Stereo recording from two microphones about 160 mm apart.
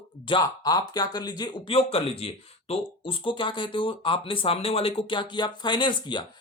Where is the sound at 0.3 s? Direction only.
25° left (ahead or behind).